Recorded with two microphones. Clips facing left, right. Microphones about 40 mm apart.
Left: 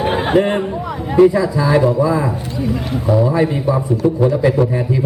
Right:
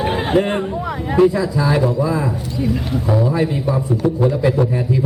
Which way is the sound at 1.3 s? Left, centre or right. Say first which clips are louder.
Left 3 dB; centre.